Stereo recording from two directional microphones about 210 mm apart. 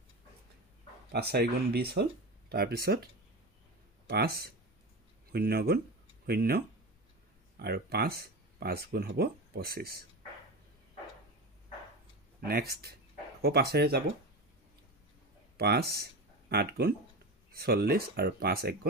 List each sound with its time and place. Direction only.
1.1 s speech: 50° right (ahead or behind)
4.1 s speech: 50° right (ahead or behind)
12.4 s speech: 50° right (ahead or behind)
15.5 s speech: 50° right (ahead or behind)